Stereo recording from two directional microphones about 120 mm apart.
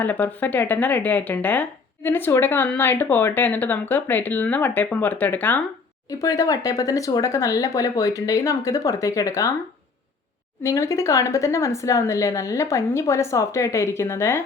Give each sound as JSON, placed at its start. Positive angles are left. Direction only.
{"t": 0.0, "sound": "speech", "side_deg": 15}
{"t": 6.2, "sound": "speech", "side_deg": 30}
{"t": 10.6, "sound": "speech", "side_deg": 25}